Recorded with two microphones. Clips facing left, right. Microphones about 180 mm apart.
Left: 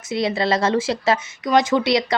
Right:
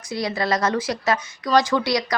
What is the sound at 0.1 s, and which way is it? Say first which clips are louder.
Speech: left 3 dB; 25° left (ahead or behind).